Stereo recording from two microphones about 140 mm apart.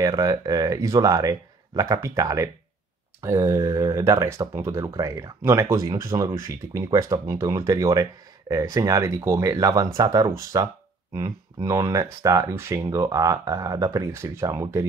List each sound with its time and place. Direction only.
0.0 s speech: 25° right (ahead or behind)